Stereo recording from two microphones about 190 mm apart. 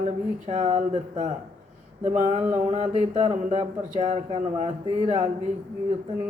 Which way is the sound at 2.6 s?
35° right (ahead or behind).